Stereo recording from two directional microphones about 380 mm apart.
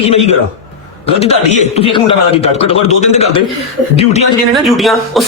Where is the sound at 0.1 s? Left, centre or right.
Centre.